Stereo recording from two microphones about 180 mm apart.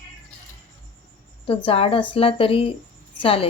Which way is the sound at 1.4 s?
30° left (ahead or behind).